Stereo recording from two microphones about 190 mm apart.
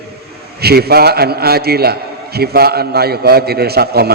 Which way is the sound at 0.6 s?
55° right (ahead or behind).